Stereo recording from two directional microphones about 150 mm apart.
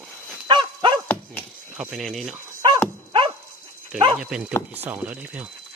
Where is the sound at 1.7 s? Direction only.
Centre (ahead or behind).